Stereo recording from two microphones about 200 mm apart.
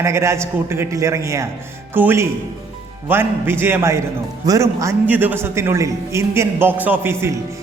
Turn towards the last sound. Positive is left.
turn(degrees=-10)  # may be behind; listen again after turning